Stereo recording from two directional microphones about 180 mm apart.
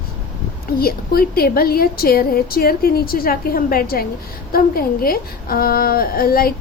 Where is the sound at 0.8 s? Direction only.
55° left (ahead or behind).